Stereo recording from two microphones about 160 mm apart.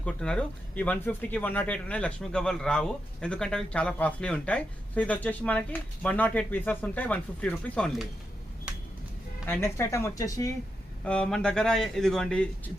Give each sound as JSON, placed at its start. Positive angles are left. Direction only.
{"t": 0.0, "sound": "speech", "side_deg": 5}
{"t": 9.5, "sound": "speech", "side_deg": 15}
{"t": 11.0, "sound": "a man's voice", "side_deg": 5}